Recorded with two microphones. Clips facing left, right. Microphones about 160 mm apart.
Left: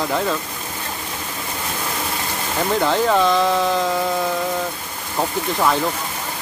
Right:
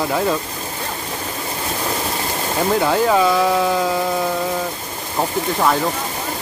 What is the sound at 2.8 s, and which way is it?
Speech, 5° right (ahead or behind).